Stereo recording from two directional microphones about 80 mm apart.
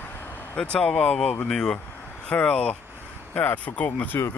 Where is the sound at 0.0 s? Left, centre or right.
Left.